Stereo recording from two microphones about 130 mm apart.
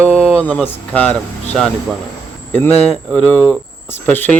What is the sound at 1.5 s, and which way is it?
Speech, 5° left (ahead or behind).